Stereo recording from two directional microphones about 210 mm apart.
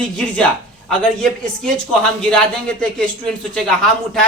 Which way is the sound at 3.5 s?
Centre (ahead or behind).